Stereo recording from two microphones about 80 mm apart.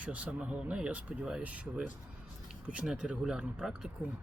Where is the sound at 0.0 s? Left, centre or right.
Centre.